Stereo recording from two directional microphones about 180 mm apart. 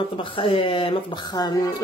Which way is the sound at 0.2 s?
30° left (ahead or behind).